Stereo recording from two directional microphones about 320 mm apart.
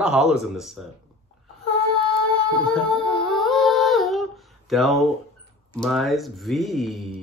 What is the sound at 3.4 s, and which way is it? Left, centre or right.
Music, centre.